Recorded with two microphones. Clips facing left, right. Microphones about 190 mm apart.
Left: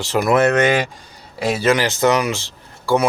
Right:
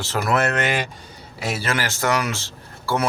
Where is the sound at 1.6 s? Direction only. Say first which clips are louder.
Left 9 dB; 20° left (ahead or behind).